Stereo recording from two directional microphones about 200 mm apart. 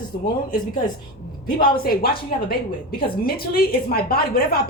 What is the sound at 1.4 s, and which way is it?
A woman's voice, 45° left (ahead or behind).